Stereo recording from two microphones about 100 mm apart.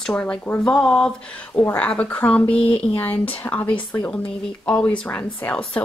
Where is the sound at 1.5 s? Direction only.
20° left (ahead or behind).